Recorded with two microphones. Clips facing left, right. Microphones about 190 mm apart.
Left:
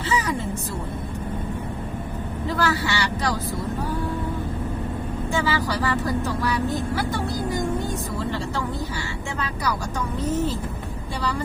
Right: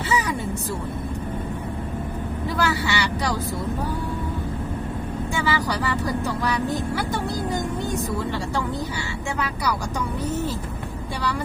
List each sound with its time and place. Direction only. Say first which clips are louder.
0.1 s vehicle: even; 10° right (ahead or behind)
2.6 s speech: even; 15° right (ahead or behind)
5.5 s speech: right 4 dB; 15° right (ahead or behind)